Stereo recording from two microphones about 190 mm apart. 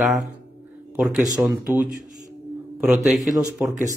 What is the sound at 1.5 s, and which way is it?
A man's voice, 10° right (ahead or behind).